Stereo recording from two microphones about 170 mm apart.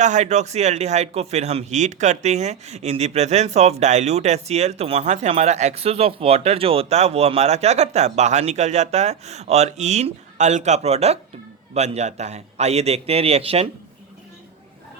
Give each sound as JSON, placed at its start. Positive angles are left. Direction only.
{"t": 0.0, "sound": "a man's voice", "side_deg": -45}